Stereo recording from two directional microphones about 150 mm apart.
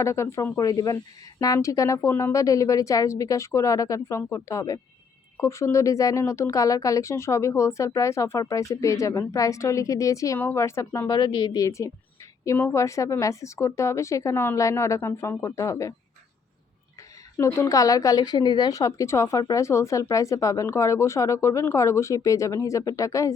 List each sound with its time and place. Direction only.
0.0 s speech: 20° left (ahead or behind)
17.3 s speech: 20° left (ahead or behind)